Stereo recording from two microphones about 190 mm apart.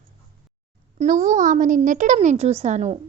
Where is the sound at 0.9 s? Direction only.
40° right (ahead or behind).